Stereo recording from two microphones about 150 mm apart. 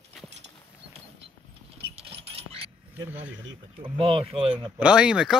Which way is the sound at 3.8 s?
35° right (ahead or behind).